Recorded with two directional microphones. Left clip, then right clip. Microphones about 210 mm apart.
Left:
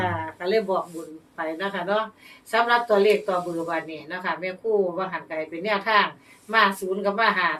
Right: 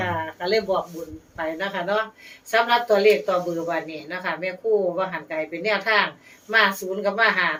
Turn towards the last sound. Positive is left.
turn(degrees=0)  # may be behind; listen again after turning